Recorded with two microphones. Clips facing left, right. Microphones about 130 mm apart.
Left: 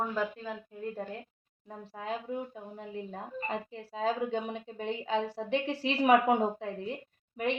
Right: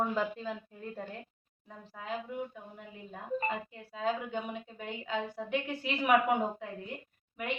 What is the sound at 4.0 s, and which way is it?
A woman's voice, 30° left (ahead or behind).